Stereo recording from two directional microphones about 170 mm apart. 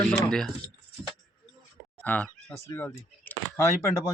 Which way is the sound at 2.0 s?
5° left (ahead or behind).